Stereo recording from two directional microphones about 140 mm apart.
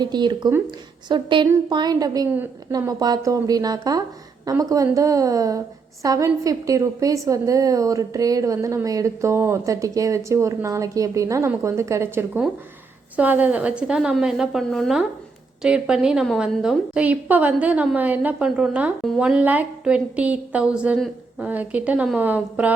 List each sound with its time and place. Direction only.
0.0 s a woman's voice: 30° right (ahead or behind); by 22.7 s 10° right (ahead or behind)